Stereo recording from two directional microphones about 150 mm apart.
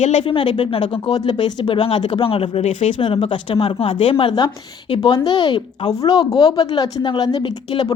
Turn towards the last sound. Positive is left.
turn(degrees=30)  # may be behind; listen again after turning